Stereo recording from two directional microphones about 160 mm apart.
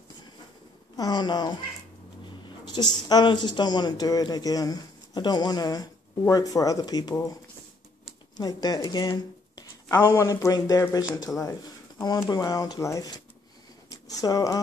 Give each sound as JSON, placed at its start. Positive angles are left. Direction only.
{"t": 0.9, "sound": "speech", "side_deg": 25}
{"t": 8.4, "sound": "speech", "side_deg": 25}